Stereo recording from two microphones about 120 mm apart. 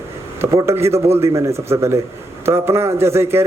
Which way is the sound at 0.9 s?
60° right (ahead or behind).